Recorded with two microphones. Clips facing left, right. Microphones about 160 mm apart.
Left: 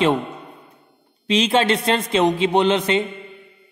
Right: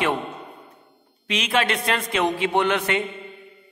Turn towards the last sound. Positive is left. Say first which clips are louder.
# left 4 dB
turn(degrees=25)  # may be behind; listen again after turning